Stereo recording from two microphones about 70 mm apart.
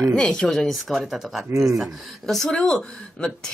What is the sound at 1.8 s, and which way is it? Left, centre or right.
Speech, centre.